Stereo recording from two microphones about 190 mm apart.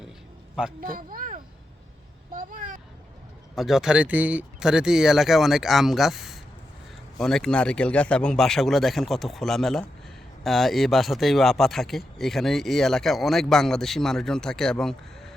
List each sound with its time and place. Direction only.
0.8 s speech: 50° right (ahead or behind)
2.3 s vehicle: 45° right (ahead or behind)
3.5 s speech: centre (ahead or behind)